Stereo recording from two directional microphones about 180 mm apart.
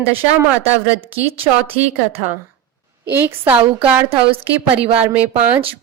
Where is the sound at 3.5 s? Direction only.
30° right (ahead or behind).